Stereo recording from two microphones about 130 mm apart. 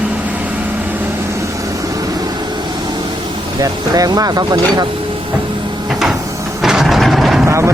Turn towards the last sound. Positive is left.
turn(degrees=-20)  # may be behind; listen again after turning